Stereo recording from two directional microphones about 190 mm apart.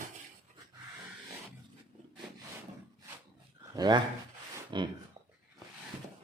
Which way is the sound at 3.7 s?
20° right (ahead or behind).